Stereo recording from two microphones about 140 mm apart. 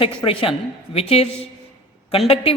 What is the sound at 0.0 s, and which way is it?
A man's voice, 40° left (ahead or behind).